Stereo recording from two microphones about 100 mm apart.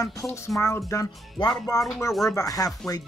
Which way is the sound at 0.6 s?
30° left (ahead or behind).